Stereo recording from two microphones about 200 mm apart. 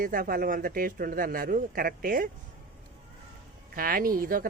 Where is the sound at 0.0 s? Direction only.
45° right (ahead or behind).